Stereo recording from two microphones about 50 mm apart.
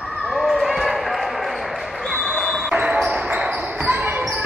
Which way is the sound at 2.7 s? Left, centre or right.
Right.